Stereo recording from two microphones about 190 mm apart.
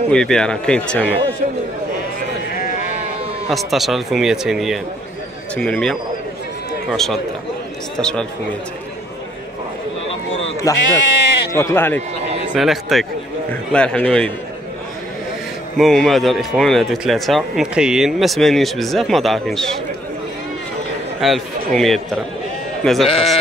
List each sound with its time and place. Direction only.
0.1 s speech: 5° left (ahead or behind)
2.5 s a sound: 45° left (ahead or behind)
3.4 s speech: centre (ahead or behind)
10.7 s speech: 15° left (ahead or behind)
11.2 s bleat: 65° left (ahead or behind)
11.5 s speech: 15° left (ahead or behind)
12.5 s speech: centre (ahead or behind)
15.8 s speech: centre (ahead or behind)
21.2 s speech: centre (ahead or behind)